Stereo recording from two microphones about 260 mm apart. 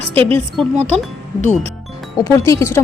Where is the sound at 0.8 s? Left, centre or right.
Right.